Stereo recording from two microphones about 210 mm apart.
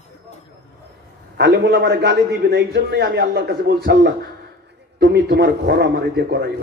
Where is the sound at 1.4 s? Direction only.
55° right (ahead or behind).